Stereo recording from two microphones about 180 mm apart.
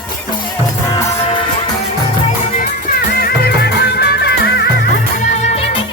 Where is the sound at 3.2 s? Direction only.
60° left (ahead or behind).